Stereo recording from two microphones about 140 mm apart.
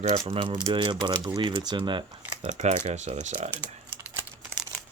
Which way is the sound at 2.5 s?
55° right (ahead or behind).